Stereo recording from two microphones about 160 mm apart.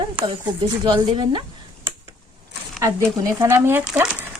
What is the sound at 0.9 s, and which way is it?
Speech, 30° right (ahead or behind).